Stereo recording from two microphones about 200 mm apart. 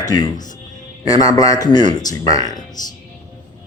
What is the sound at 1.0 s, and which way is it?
Speech, 20° left (ahead or behind).